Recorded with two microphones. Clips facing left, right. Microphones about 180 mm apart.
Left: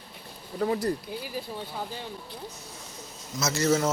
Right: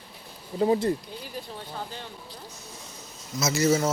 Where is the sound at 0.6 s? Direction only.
25° right (ahead or behind).